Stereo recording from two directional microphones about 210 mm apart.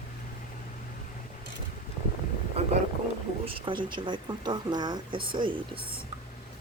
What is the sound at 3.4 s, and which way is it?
Speech, 25° right (ahead or behind).